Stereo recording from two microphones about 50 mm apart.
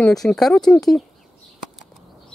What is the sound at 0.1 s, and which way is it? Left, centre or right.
Speech, centre.